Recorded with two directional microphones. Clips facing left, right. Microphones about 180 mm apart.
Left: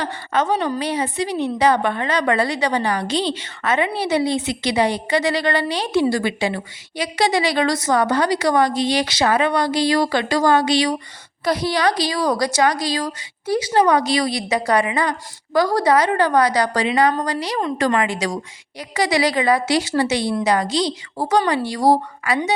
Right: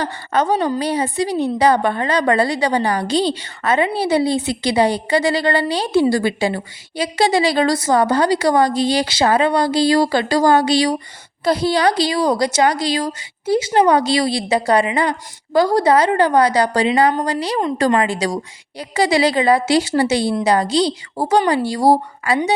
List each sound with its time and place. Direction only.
0.0 s a woman's voice: 35° right (ahead or behind)